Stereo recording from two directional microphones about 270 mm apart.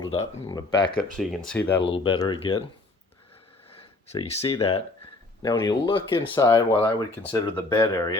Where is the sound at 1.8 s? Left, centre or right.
Centre.